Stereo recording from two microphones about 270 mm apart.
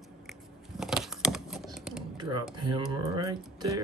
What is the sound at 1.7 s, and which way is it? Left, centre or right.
Typing, centre.